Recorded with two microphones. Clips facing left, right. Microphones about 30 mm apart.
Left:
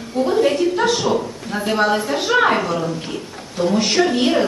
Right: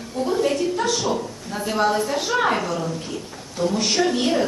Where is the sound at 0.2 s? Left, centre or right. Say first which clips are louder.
Left 5 dB; left.